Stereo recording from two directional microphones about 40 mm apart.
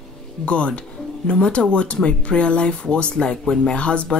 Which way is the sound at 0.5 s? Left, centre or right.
Left.